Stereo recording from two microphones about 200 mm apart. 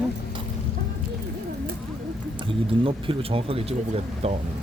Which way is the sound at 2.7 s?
25° right (ahead or behind).